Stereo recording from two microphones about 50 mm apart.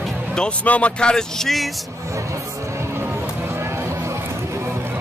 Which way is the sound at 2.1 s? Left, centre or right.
Right.